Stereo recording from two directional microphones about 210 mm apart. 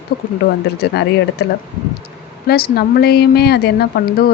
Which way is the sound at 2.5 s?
50° left (ahead or behind).